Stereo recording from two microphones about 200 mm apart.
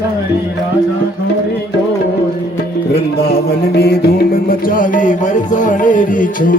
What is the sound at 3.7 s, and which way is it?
Music, 55° left (ahead or behind).